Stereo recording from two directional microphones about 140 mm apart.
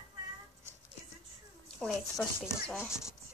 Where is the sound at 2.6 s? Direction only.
15° left (ahead or behind).